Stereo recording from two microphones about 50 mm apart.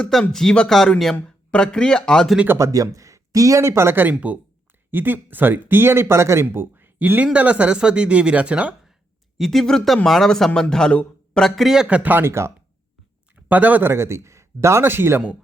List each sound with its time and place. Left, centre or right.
0.1 s speech: centre
1.5 s speech: centre
2.6 s speech: right
4.1 s speech: right
4.9 s speech: right
6.5 s speech: right
7.3 s speech: right
9.4 s speech: centre
11.6 s speech: centre
12.2 s speech: right
13.5 s speech: right
13.8 s a man's voice: right
14.8 s speech: right